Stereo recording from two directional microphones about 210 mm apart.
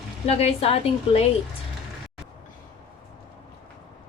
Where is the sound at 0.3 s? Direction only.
30° left (ahead or behind).